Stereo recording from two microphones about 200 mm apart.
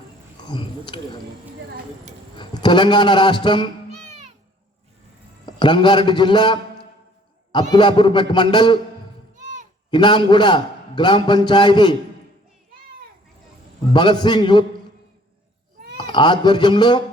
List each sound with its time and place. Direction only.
0.4 s speech: 25° left (ahead or behind)
2.4 s a man's voice: 20° left (ahead or behind)
5.5 s a man's voice: 25° left (ahead or behind)
9.9 s a man's voice: 25° left (ahead or behind)
13.9 s a man's voice: 20° left (ahead or behind)
16.0 s speech: 25° left (ahead or behind)